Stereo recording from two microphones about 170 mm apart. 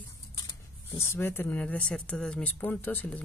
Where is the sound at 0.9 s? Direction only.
15° left (ahead or behind).